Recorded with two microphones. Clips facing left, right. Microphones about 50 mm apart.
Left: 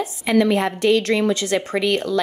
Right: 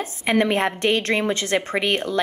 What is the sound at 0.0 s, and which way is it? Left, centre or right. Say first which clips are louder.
A woman's voice: left 2 dB; right.